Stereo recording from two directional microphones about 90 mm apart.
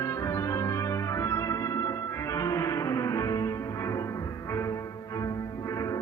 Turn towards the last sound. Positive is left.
turn(degrees=35)  # may be behind; listen again after turning